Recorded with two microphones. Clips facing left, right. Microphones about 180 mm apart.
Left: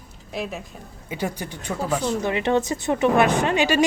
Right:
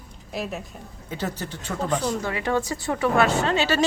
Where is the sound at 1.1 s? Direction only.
10° left (ahead or behind).